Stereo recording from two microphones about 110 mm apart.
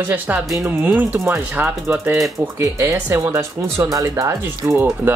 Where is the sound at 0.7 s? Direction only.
15° right (ahead or behind).